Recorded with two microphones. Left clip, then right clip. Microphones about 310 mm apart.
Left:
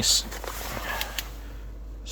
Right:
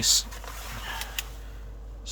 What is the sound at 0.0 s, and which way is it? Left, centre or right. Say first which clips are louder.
Speech: even; centre.